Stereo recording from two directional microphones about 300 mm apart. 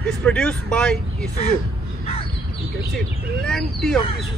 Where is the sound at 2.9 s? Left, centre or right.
Centre.